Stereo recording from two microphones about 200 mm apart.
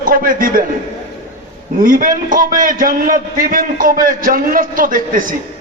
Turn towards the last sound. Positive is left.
turn(degrees=-45)  # may be behind; listen again after turning